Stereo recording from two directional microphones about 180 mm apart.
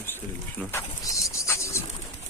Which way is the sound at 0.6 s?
10° left (ahead or behind).